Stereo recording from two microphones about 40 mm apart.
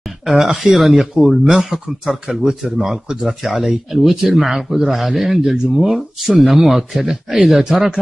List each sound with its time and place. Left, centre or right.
0.2 s speech: centre
1.1 s speech: centre